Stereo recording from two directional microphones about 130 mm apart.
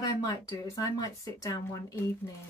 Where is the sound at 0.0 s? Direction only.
30° left (ahead or behind).